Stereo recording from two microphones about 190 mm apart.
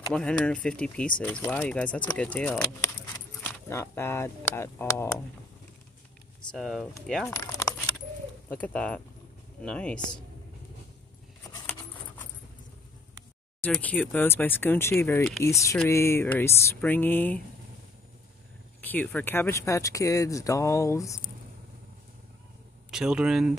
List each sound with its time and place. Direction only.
0.1 s speech: 5° left (ahead or behind)
6.5 s speech: centre (ahead or behind)
7.2 s a sound: 15° left (ahead or behind)
8.5 s speech: 5° left (ahead or behind)
13.6 s speech: 5° left (ahead or behind)
18.8 s speech: 10° left (ahead or behind)
22.8 s speech: 5° right (ahead or behind)